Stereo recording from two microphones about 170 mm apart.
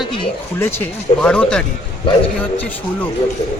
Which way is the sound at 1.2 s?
5° left (ahead or behind).